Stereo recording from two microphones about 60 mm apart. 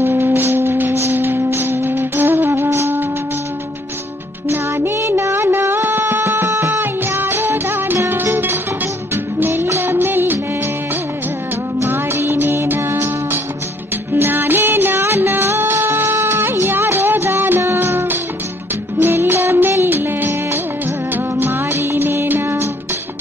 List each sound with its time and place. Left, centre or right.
0.0 s music: right
4.5 s music: right
4.9 s music: right
6.7 s music: right
9.8 s music of bollywood: right
11.8 s music: right